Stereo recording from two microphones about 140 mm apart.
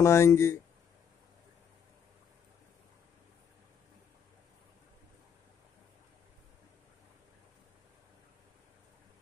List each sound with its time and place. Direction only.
0.0 s speech: 20° left (ahead or behind)